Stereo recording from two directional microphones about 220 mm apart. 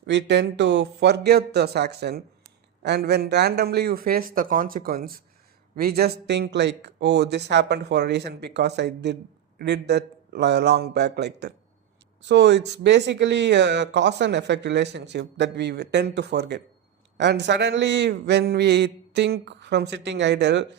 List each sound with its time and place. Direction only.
0.0 s speech: 55° right (ahead or behind)